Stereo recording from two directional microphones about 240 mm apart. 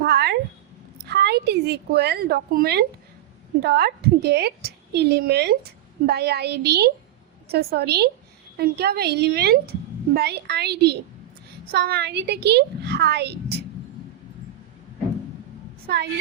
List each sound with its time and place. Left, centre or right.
0.0 s a sound: right
1.0 s a woman's voice: right
15.9 s a woman's voice: right